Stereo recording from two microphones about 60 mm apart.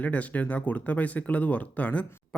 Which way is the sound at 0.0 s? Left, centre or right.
Left.